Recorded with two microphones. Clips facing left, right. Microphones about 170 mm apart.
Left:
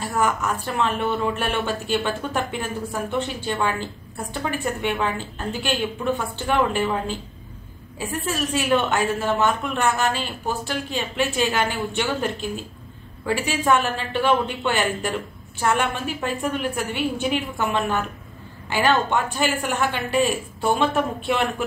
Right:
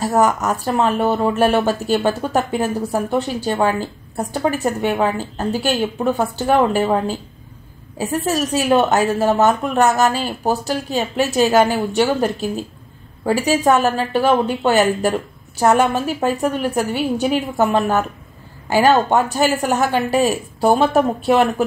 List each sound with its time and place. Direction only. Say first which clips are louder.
0.0 s speech: right 7 dB; 40° right (ahead or behind)